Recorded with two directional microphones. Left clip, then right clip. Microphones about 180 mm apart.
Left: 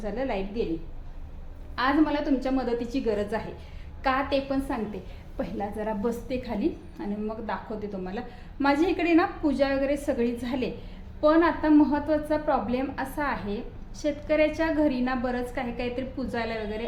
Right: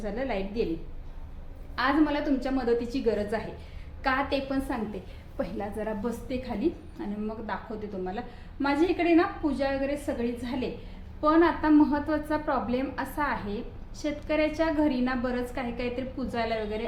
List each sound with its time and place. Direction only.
0.0 s a woman's voice: 10° left (ahead or behind)
1.7 s a woman's voice: 10° left (ahead or behind)
8.6 s a woman's voice: 30° left (ahead or behind)
11.2 s a woman's voice: 20° left (ahead or behind)